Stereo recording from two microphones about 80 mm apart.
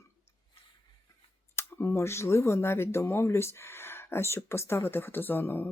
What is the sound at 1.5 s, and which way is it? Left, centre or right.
Speech, left.